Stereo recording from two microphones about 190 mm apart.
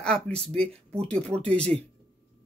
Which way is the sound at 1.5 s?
35° right (ahead or behind).